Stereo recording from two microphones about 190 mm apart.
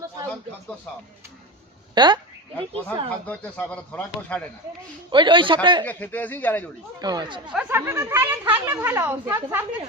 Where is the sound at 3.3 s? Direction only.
5° left (ahead or behind).